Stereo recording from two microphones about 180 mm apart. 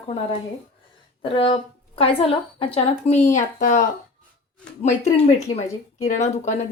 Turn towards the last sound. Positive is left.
turn(degrees=40)  # may be behind; listen again after turning